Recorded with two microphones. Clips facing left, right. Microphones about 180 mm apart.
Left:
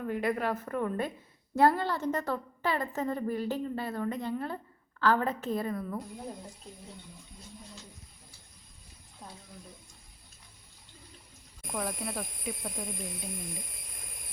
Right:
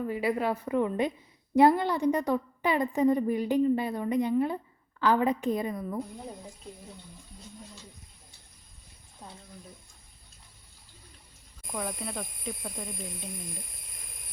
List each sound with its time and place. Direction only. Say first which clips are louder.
0.0 s a woman's voice: right 2 dB; 5° right (ahead or behind)
11.7 s speech: even; centre (ahead or behind)